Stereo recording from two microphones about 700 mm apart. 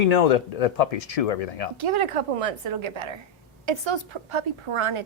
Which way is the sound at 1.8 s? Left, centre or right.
Right.